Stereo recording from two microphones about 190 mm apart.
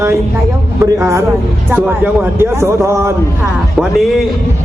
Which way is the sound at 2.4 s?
15° right (ahead or behind).